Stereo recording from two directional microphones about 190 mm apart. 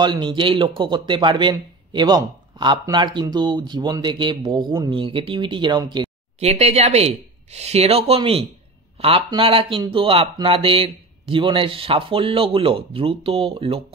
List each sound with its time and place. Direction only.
0.0 s speech: 25° right (ahead or behind)